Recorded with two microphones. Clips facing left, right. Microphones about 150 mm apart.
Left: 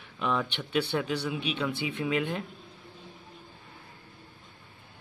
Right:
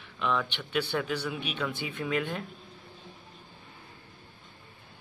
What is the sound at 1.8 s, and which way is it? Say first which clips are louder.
Speech: left 2 dB; 20° left (ahead or behind).